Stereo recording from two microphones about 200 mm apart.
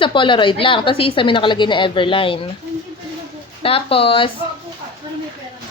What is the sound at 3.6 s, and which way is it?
Speech, 30° left (ahead or behind).